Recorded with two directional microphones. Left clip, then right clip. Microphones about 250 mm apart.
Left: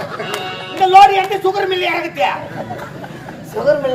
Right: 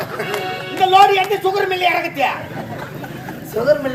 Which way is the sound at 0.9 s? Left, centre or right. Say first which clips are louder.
Left 4 dB; centre.